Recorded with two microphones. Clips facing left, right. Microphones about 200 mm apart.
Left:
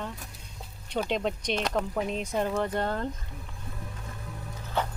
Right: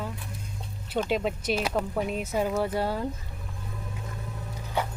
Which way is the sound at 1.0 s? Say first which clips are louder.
Right 2 dB; 5° right (ahead or behind).